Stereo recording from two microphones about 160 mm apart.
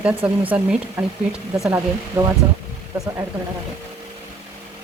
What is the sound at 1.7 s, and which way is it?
Speech, 20° right (ahead or behind).